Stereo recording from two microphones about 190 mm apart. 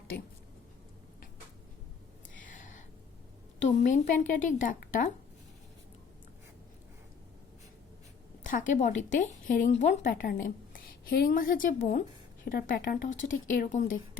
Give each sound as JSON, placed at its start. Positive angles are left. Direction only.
{"t": 2.4, "sound": "a sound", "side_deg": 45}
{"t": 3.6, "sound": "a woman's voice", "side_deg": 40}
{"t": 8.4, "sound": "a woman's voice", "side_deg": 45}